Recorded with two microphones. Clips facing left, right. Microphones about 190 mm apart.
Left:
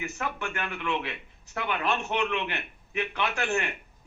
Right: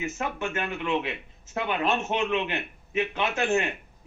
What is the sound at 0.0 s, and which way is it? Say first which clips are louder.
A man's voice: right 3 dB; 20° right (ahead or behind).